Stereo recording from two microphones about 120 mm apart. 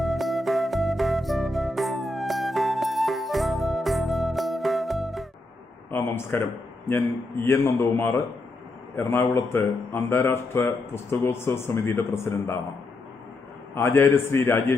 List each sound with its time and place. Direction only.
0.0 s music: centre (ahead or behind)
5.9 s a sound: 20° left (ahead or behind)
7.4 s speech: 20° left (ahead or behind)
13.7 s speech: 20° left (ahead or behind)